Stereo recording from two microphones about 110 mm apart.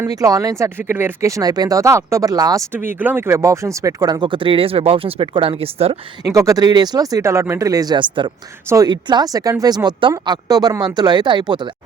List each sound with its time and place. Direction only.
0.2 s speech: 35° right (ahead or behind)
2.7 s speech: 15° right (ahead or behind); by 6.0 s 60° right (ahead or behind)
6.2 s speech: 30° right (ahead or behind)